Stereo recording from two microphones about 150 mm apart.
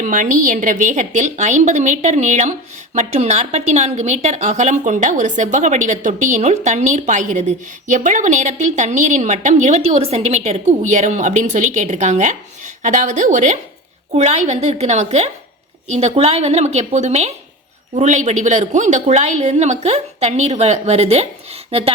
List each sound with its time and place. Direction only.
0.0 s a woman's voice: 60° right (ahead or behind); by 21.9 s 40° right (ahead or behind)